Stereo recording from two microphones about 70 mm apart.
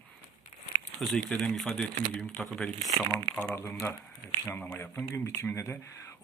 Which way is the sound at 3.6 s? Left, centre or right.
Left.